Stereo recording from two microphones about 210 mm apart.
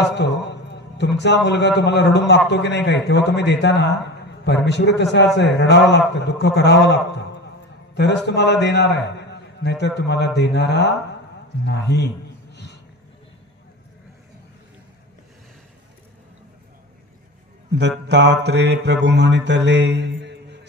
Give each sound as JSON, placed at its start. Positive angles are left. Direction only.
{"t": 0.1, "sound": "a man's voice", "side_deg": 55}
{"t": 17.7, "sound": "mantra", "side_deg": -55}